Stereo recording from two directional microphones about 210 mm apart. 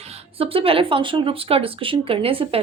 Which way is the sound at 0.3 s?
25° right (ahead or behind).